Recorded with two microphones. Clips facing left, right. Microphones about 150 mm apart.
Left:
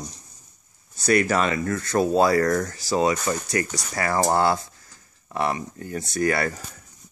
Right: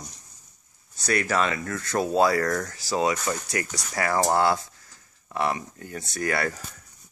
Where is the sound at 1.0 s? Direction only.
5° left (ahead or behind).